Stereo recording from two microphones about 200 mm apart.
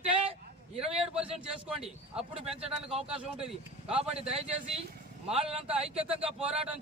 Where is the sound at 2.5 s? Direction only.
30° right (ahead or behind).